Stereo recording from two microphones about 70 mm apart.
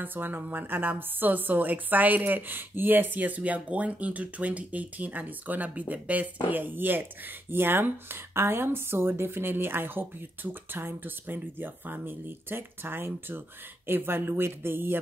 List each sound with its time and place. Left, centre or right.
0.0 s a woman's voice: right